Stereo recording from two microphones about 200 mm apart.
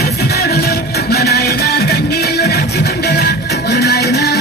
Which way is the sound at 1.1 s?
55° left (ahead or behind).